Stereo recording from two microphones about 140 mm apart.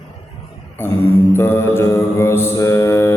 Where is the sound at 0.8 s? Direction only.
15° left (ahead or behind).